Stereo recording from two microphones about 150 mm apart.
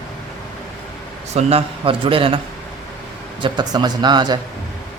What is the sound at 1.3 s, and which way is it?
Speech, 40° right (ahead or behind).